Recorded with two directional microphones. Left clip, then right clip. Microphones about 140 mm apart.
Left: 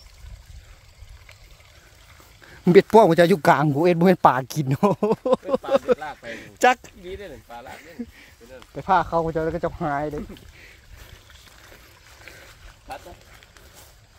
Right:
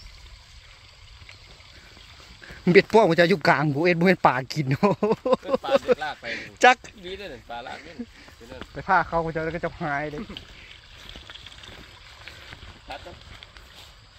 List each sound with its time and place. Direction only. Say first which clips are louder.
2.6 s speech: left 3 dB; 30° left (ahead or behind)
5.7 s a sound: left 1 dB; 20° left (ahead or behind)
5.9 s a sound: right 3 dB; 65° right (ahead or behind)
6.3 s speech: right 1 dB; 10° left (ahead or behind)
7.1 s speech: right 1 dB; 60° right (ahead or behind)
8.7 s speech: left 2 dB; 30° left (ahead or behind)